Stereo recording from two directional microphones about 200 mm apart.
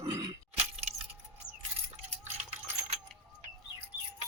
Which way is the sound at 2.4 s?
35° right (ahead or behind).